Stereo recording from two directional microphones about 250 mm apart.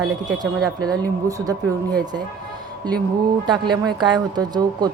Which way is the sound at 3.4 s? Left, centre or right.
Centre.